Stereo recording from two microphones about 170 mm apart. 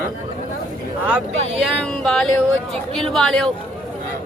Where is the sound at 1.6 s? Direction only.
5° left (ahead or behind).